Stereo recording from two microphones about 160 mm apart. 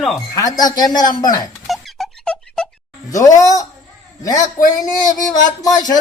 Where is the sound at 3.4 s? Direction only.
20° left (ahead or behind).